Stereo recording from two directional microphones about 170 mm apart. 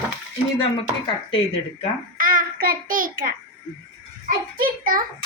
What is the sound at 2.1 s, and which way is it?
A child's voice, 55° right (ahead or behind).